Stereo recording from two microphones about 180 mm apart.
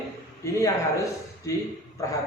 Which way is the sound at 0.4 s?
15° left (ahead or behind).